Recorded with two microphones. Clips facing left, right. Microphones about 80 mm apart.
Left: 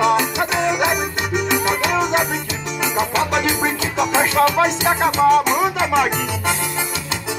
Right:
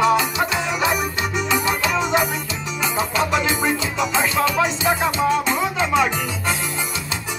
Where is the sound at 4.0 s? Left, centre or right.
Left.